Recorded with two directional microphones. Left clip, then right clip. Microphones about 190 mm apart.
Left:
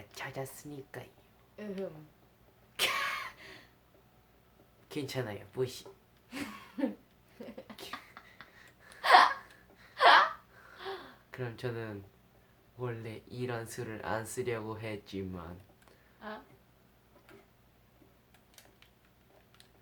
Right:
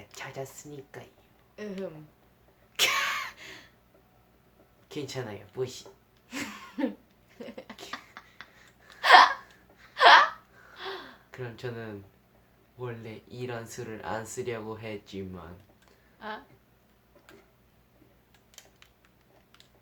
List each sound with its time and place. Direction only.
0.1 s speech: 25° left (ahead or behind)
1.5 s speech: 25° right (ahead or behind)
2.7 s a sound: 25° right (ahead or behind)
4.9 s speech: 25° left (ahead or behind)
6.2 s a sound: 25° right (ahead or behind)
7.9 s beatboxing: 25° right (ahead or behind)
9.0 s hiccup: 25° right (ahead or behind)
9.9 s a sound: 25° right (ahead or behind)
10.8 s gasp: 25° right (ahead or behind)
11.3 s speech: 25° left (ahead or behind)
16.2 s speech: 25° right (ahead or behind)